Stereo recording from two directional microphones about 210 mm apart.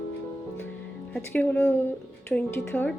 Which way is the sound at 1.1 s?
10° left (ahead or behind).